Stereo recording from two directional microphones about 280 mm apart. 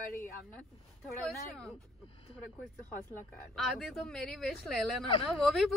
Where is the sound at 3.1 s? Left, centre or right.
Centre.